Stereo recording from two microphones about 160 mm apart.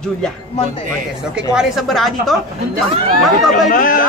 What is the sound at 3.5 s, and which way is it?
Speech, 55° left (ahead or behind).